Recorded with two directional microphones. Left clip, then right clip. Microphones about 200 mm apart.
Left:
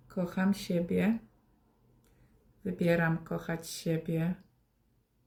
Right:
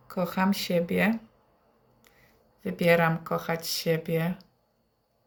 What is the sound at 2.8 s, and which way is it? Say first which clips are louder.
Speech: right 7 dB; 15° left (ahead or behind).